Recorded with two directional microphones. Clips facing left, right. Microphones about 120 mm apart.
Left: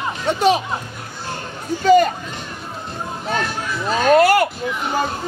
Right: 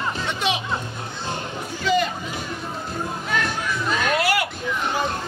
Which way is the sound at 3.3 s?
35° left (ahead or behind).